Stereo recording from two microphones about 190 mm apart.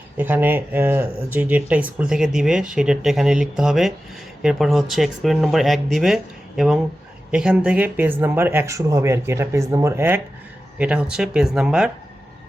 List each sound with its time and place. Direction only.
0.2 s speech: 10° right (ahead or behind)